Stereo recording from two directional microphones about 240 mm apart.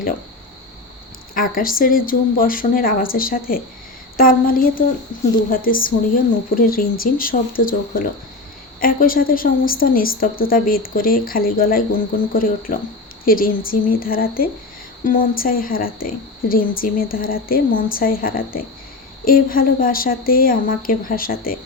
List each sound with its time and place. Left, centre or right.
1.3 s a woman's voice: left